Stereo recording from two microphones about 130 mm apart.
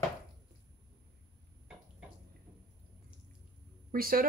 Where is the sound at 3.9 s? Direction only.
90° right.